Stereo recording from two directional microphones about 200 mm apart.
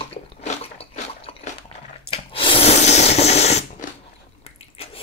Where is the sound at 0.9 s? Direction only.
35° left (ahead or behind).